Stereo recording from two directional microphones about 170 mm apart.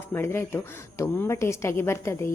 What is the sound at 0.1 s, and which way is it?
Speech, 15° left (ahead or behind).